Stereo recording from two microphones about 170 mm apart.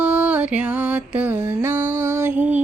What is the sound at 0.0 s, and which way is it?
Music, 5° right (ahead or behind).